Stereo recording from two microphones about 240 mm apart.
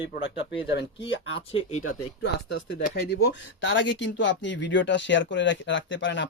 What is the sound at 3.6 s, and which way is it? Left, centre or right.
Speech, left.